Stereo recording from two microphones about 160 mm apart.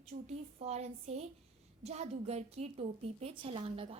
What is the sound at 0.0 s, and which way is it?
A woman's voice, 40° right (ahead or behind).